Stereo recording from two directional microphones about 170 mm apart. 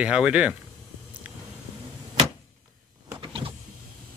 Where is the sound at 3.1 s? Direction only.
30° right (ahead or behind).